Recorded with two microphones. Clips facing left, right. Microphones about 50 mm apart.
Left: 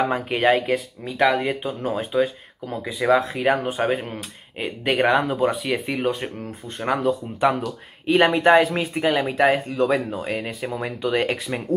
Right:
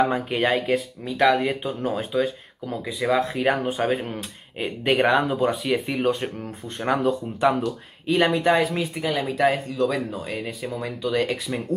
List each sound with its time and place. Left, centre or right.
0.0 s speech: centre
8.1 s speech: left
8.4 s speech: left